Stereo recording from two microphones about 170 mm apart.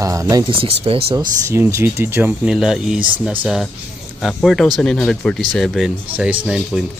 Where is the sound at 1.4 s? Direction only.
15° right (ahead or behind).